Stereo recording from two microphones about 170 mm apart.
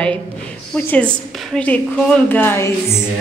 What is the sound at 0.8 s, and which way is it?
A woman's voice, 5° left (ahead or behind).